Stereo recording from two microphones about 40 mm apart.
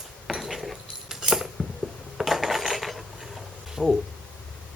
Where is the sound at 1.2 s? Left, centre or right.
Centre.